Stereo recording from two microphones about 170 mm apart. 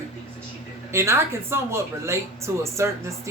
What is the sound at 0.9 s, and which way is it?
Speech, 15° right (ahead or behind).